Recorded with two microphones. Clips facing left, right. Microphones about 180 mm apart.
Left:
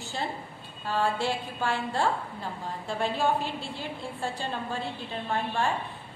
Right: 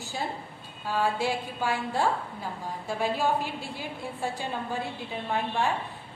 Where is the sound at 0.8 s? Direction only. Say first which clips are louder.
Even; 15° right (ahead or behind).